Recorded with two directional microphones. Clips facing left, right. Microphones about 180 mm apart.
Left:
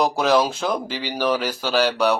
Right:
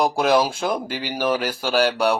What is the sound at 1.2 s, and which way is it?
Speech, 5° right (ahead or behind).